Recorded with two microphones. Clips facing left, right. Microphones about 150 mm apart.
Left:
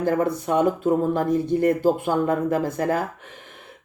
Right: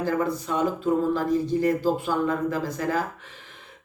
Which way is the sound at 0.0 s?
55° left (ahead or behind).